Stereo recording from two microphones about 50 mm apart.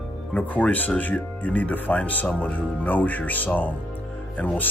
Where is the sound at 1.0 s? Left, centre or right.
Left.